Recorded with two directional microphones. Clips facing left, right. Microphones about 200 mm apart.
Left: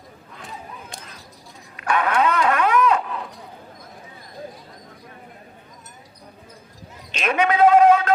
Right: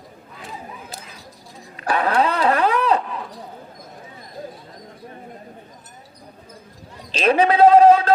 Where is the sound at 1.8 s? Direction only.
35° right (ahead or behind).